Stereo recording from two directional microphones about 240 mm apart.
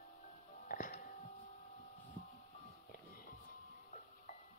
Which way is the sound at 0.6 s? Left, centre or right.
Left.